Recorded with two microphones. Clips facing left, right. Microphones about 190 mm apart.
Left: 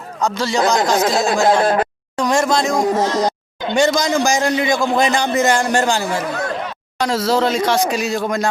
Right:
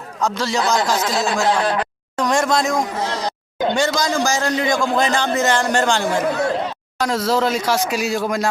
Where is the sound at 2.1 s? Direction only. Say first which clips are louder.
Left 2 dB; centre (ahead or behind).